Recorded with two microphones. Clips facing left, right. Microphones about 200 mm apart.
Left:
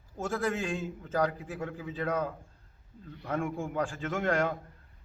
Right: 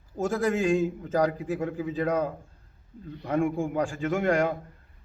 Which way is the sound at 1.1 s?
15° right (ahead or behind).